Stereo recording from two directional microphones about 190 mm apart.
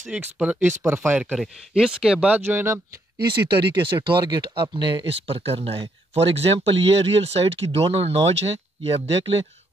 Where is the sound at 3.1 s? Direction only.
25° right (ahead or behind).